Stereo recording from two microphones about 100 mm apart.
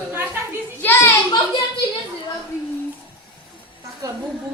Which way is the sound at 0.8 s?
25° left (ahead or behind).